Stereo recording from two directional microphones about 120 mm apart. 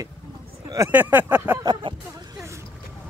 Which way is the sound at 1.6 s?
40° right (ahead or behind).